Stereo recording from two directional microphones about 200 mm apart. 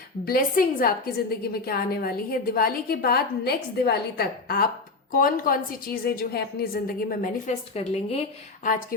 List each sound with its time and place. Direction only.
0.3 s a woman's voice: 45° left (ahead or behind)